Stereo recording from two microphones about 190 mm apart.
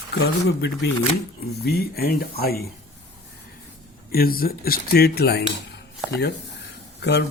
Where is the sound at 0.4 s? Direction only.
65° left (ahead or behind).